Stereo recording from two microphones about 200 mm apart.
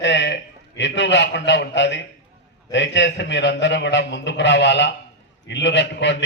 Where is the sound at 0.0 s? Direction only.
60° left (ahead or behind).